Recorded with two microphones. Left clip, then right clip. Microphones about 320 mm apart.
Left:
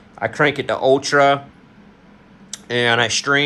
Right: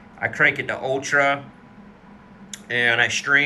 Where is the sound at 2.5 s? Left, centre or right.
Left.